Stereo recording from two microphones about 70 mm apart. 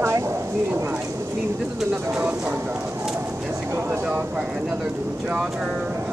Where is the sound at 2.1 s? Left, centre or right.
Right.